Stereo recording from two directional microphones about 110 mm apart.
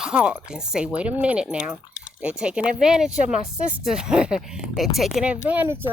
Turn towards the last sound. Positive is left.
turn(degrees=-15)  # may be behind; listen again after turning